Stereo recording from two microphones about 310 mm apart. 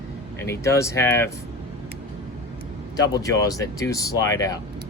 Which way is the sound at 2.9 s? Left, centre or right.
Centre.